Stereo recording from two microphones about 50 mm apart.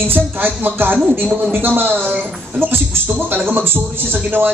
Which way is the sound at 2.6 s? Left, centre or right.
Right.